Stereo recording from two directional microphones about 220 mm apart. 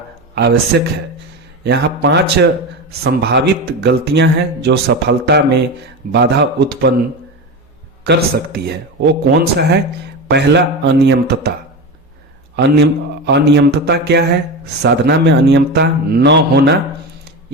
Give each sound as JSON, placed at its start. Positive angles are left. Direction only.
{"t": 0.3, "sound": "a man's voice", "side_deg": -50}
{"t": 8.0, "sound": "a man's voice", "side_deg": -50}
{"t": 12.5, "sound": "a man's voice", "side_deg": -50}